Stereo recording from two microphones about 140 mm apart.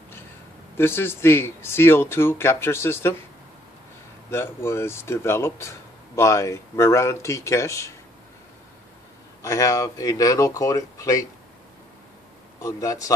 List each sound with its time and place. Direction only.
0.7 s speech: 15° left (ahead or behind)
4.3 s speech: 15° left (ahead or behind)
9.4 s speech: 25° left (ahead or behind)
12.6 s speech: 25° left (ahead or behind)